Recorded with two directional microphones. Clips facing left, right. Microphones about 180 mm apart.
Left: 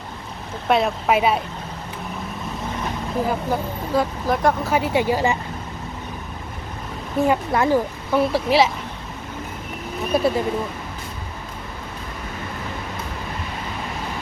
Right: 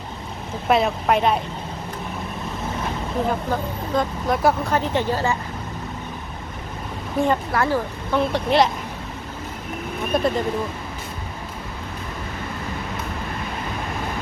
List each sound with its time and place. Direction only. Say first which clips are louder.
0.7 s speech: even; centre (ahead or behind)
3.2 s speech: left 1 dB; 5° left (ahead or behind)
7.2 s speech: left 1 dB; centre (ahead or behind)
7.5 s speech: left 3 dB; 20° left (ahead or behind)
8.1 s speech: left 1 dB; 5° left (ahead or behind)
10.1 s speech: left 2 dB; 5° left (ahead or behind)